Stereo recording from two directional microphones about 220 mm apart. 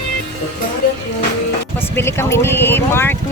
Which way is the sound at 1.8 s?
10° left (ahead or behind).